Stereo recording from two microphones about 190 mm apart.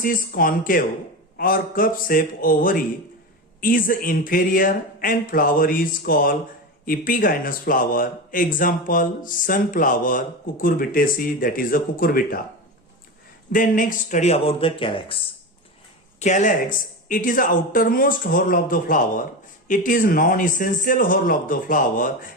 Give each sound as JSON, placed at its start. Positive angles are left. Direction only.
{"t": 0.0, "sound": "speech", "side_deg": 45}
{"t": 13.5, "sound": "speech", "side_deg": 45}
{"t": 16.2, "sound": "speech", "side_deg": 40}